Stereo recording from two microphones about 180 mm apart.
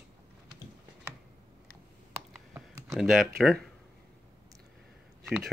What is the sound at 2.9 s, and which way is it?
Speech, centre (ahead or behind).